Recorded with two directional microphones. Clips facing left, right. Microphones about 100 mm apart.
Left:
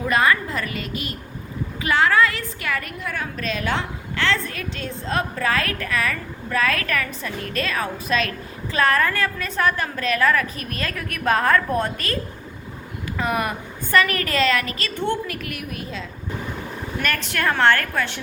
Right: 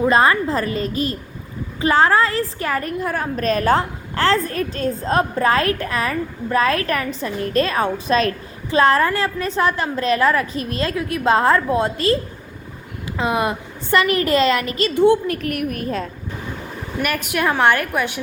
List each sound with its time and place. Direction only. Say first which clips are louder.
0.0 s a woman's voice: right 4 dB; 30° right (ahead or behind)
14.9 s a woman's voice: right 10 dB; 15° right (ahead or behind)
15.3 s a woman's voice: right 8 dB; 40° right (ahead or behind)
17.0 s a woman's voice: right 4 dB; 10° right (ahead or behind)